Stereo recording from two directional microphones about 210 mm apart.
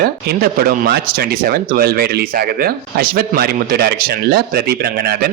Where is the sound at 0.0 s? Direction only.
45° right (ahead or behind).